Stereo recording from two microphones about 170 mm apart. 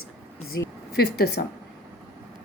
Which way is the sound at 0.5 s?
70° left (ahead or behind).